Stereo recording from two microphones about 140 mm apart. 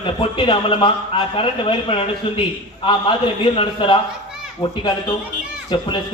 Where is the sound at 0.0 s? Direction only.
35° left (ahead or behind).